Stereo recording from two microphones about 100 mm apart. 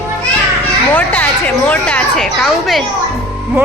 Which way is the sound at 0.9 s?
15° left (ahead or behind).